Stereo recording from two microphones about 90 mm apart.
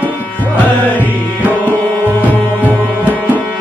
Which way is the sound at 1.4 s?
20° right (ahead or behind).